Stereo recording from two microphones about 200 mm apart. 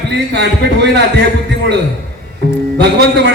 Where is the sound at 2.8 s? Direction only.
55° right (ahead or behind).